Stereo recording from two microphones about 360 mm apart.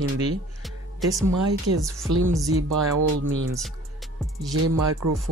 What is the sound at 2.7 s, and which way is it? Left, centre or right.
Music, right.